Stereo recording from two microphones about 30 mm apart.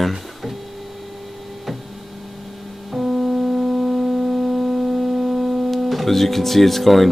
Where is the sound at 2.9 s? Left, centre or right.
Centre.